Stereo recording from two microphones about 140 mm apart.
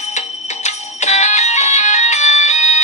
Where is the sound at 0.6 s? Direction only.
55° left (ahead or behind).